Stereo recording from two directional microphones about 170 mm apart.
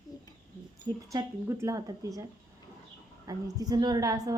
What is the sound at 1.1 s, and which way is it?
A woman's voice, 15° right (ahead or behind).